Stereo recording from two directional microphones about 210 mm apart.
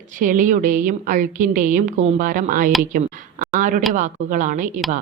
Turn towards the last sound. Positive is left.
turn(degrees=-40)  # may be behind; listen again after turning